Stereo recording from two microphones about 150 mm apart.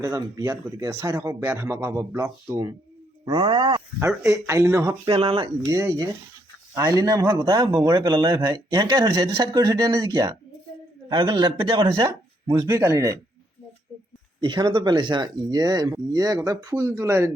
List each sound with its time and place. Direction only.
0.0 s speech: 20° right (ahead or behind)
3.2 s speech: 30° right (ahead or behind)
5.0 s speech: 40° right (ahead or behind)
5.6 s speech: 20° right (ahead or behind)
14.4 s speech: 30° right (ahead or behind)